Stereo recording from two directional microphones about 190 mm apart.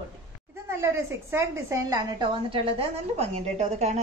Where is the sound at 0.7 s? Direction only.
15° right (ahead or behind).